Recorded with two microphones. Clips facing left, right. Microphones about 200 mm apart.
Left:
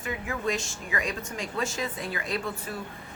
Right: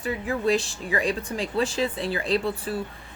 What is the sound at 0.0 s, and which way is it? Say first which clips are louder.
Speech: right 5 dB; 35° right (ahead or behind).